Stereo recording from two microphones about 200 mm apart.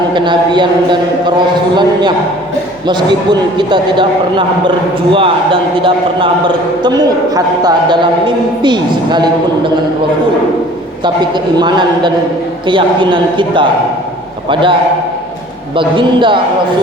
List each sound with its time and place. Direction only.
0.1 s a man's voice: 25° right (ahead or behind)
1.7 s a man's voice: 20° right (ahead or behind)
5.8 s a man's voice: 25° right (ahead or behind)
7.3 s a man's voice: 20° right (ahead or behind)
11.5 s a man's voice: 20° right (ahead or behind)